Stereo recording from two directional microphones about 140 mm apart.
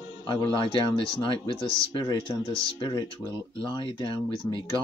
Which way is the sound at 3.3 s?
25° right (ahead or behind).